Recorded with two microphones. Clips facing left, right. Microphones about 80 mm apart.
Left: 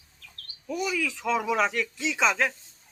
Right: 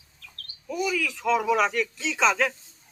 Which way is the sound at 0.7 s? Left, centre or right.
Centre.